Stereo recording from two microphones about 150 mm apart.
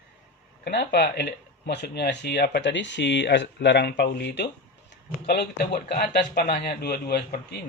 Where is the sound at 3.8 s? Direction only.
90° left.